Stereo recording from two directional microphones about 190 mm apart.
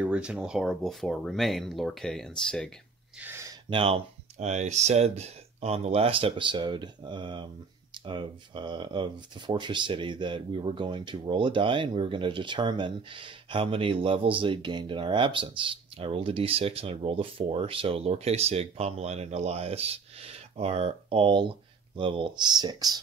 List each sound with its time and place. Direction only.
0.0 s speech: 5° right (ahead or behind)
3.2 s a sound: 15° right (ahead or behind)
3.7 s speech: 30° right (ahead or behind)